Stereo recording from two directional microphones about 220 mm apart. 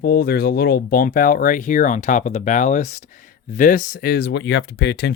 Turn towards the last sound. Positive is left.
turn(degrees=50)  # may be behind; listen again after turning